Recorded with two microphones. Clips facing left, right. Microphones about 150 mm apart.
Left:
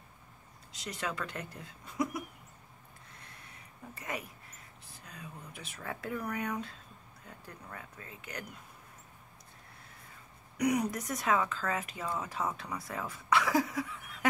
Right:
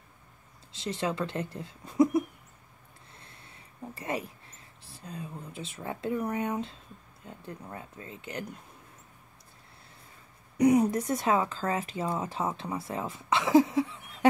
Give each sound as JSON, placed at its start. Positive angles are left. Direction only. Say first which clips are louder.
{"t": 0.7, "sound": "speech", "louder": "right 7 dB", "side_deg": -30}
{"t": 3.1, "sound": "a sound", "louder": "right 1 dB", "side_deg": -30}
{"t": 7.2, "sound": "speech", "louder": "right 7 dB", "side_deg": -25}
{"t": 10.6, "sound": "speech", "louder": "right 8 dB", "side_deg": -30}